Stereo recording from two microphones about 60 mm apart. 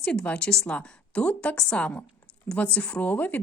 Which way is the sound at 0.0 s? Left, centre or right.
Centre.